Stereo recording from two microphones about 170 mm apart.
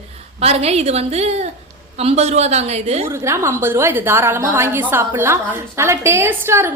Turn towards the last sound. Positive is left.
turn(degrees=-15)  # may be behind; listen again after turning